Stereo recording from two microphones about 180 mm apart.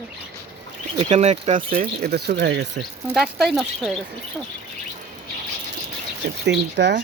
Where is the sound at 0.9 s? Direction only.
40° right (ahead or behind); by 2.8 s 70° right (ahead or behind).